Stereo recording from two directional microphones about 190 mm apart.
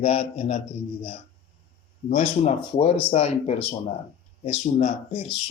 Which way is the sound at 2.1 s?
35° left (ahead or behind).